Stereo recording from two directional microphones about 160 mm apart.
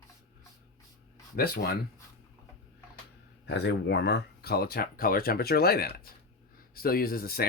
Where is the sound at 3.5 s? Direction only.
90° left.